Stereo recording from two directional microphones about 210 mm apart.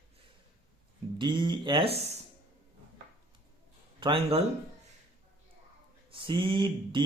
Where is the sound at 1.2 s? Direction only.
20° right (ahead or behind).